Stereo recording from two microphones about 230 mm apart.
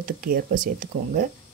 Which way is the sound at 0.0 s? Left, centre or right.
Right.